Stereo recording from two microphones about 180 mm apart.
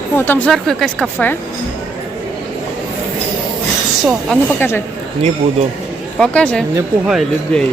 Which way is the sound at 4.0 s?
Centre (ahead or behind).